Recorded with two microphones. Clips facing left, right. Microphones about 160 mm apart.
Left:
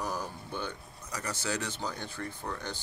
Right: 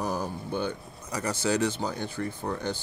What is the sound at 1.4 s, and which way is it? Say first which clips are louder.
Speech: right 9 dB; 15° right (ahead or behind).